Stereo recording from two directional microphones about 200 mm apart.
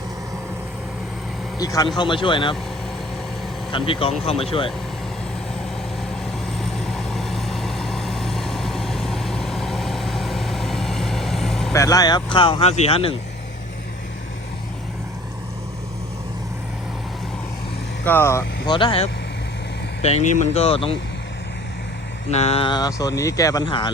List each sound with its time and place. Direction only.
1.5 s speech: 15° left (ahead or behind)
3.7 s speech: 25° left (ahead or behind)
6.6 s vehicle: centre (ahead or behind)
11.7 s speech: 15° left (ahead or behind)
18.0 s speech: 10° left (ahead or behind); by 20.9 s 30° left (ahead or behind)
22.3 s speech: 30° left (ahead or behind)